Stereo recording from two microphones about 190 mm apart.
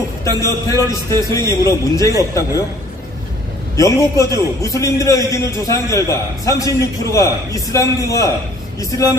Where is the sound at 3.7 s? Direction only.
15° left (ahead or behind).